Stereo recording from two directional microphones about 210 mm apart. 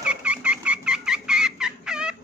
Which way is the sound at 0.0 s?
5° right (ahead or behind).